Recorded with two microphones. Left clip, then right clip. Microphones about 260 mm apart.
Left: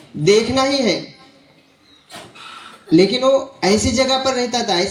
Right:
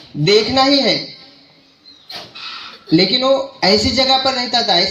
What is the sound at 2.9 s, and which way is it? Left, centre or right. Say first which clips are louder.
A man's voice: even; right.